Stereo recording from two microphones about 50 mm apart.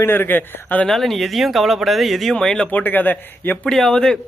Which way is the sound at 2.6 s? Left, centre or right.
Left.